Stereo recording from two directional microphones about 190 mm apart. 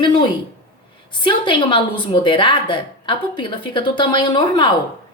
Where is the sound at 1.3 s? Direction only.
25° left (ahead or behind).